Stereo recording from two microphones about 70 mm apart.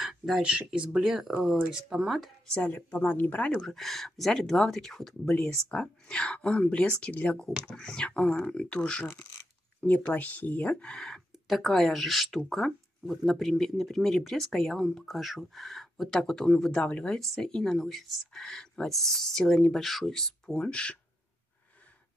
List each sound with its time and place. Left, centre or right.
0.0 s a sound: centre
0.4 s speech: centre
2.7 s speech: left
3.6 s speech: centre